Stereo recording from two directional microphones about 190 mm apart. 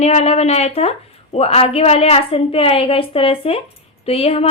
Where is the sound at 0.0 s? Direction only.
35° left (ahead or behind).